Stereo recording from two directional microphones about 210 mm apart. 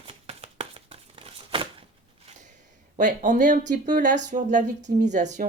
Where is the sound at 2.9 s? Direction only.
35° right (ahead or behind).